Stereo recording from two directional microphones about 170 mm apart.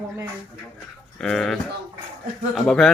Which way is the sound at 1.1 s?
5° left (ahead or behind).